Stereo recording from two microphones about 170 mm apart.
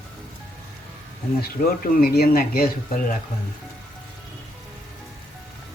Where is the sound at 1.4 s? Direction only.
60° left (ahead or behind).